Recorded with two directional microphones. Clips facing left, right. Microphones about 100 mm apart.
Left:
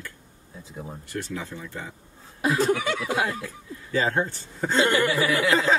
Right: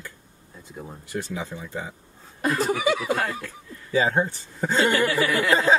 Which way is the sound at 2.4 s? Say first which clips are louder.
Even; centre (ahead or behind).